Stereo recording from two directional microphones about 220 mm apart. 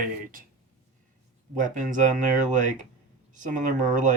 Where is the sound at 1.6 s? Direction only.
35° right (ahead or behind).